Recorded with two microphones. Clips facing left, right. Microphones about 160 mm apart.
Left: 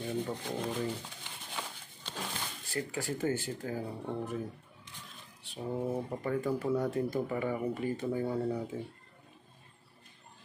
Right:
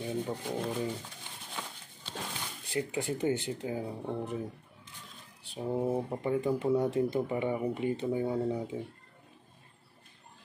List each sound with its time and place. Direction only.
0.0 s speech: 5° right (ahead or behind)
1.5 s a sound: centre (ahead or behind)
2.7 s speech: 20° right (ahead or behind)
5.4 s speech: 30° right (ahead or behind)